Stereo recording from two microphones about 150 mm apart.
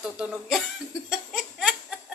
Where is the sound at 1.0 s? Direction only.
Centre (ahead or behind).